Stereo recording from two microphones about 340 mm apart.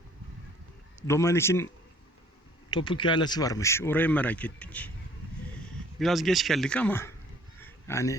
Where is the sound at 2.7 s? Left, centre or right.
Centre.